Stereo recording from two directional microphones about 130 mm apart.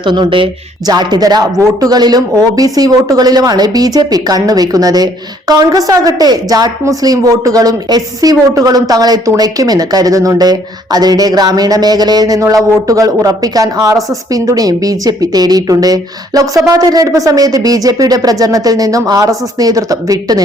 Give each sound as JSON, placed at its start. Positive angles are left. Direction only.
{"t": 0.0, "sound": "a woman's voice", "side_deg": -35}